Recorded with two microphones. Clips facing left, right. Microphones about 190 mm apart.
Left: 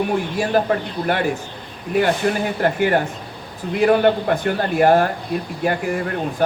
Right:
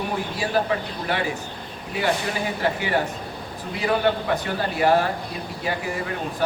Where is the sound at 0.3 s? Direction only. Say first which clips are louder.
Left 4 dB; 50° left (ahead or behind).